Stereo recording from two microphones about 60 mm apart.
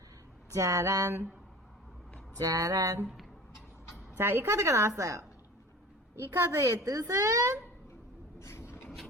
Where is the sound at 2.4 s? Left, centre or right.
Right.